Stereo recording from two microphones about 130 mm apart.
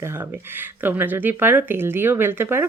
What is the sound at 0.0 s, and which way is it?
Speech, 20° right (ahead or behind).